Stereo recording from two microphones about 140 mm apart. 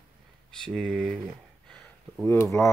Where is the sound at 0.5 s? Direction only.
5° left (ahead or behind).